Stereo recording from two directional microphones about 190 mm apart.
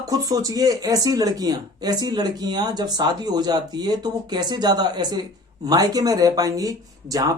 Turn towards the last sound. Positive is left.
turn(degrees=-20)  # may be behind; listen again after turning